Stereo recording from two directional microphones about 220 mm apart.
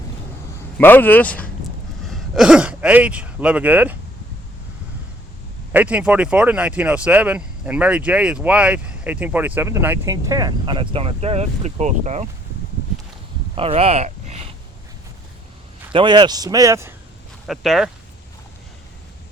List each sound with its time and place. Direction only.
0.8 s speech: 10° left (ahead or behind); by 3.9 s 5° right (ahead or behind)
5.7 s speech: 5° right (ahead or behind); by 12.3 s 30° right (ahead or behind)
13.6 s speech: 25° right (ahead or behind)
15.9 s speech: 20° right (ahead or behind)
17.4 s speech: centre (ahead or behind)